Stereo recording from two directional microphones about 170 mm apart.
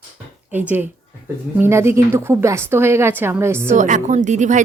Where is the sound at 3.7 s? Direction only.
45° right (ahead or behind).